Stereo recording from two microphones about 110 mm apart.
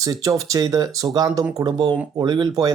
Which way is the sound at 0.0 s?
35° right (ahead or behind).